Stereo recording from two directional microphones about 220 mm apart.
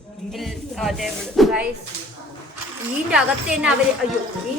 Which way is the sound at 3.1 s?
5° right (ahead or behind).